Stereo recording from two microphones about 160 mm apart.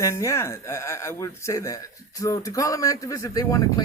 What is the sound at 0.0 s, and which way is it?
A man's voice, 20° left (ahead or behind).